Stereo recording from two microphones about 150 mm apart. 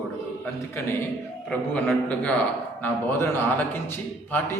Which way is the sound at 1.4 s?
10° left (ahead or behind).